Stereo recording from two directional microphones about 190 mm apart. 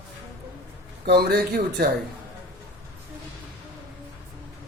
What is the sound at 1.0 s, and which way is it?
Speech, 55° right (ahead or behind).